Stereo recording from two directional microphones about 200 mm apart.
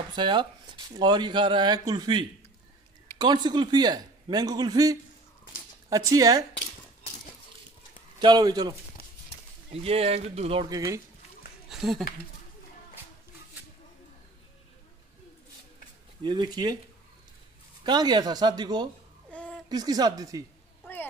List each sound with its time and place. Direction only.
0.1 s speech: 25° right (ahead or behind)
8.2 s speech: 20° right (ahead or behind)
9.0 s horse: 50° left (ahead or behind)
9.7 s speech: 30° right (ahead or behind)
11.7 s a sound: centre (ahead or behind)
16.2 s speech: 20° right (ahead or behind)
17.8 s speech: 20° right (ahead or behind)
19.3 s a sound: 5° left (ahead or behind)
19.7 s speech: 20° right (ahead or behind)